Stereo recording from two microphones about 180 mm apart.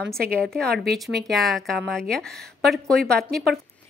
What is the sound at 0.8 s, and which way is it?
Speech, 65° right (ahead or behind).